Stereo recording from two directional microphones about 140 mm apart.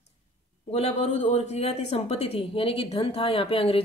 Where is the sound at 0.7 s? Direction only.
50° left (ahead or behind).